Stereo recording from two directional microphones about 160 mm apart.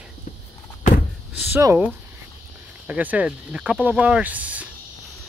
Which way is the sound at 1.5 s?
15° right (ahead or behind).